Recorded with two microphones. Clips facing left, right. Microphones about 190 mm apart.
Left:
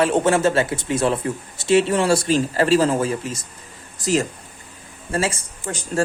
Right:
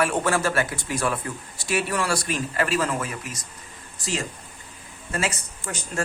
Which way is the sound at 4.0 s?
40° left (ahead or behind).